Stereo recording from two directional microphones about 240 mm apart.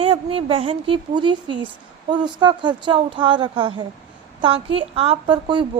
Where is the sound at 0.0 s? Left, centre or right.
Right.